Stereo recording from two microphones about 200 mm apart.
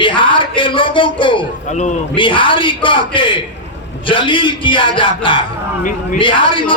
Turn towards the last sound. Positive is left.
turn(degrees=25)  # may be behind; listen again after turning